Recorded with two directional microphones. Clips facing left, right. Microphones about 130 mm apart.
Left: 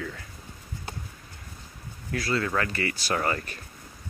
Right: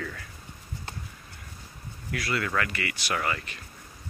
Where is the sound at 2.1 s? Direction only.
30° left (ahead or behind).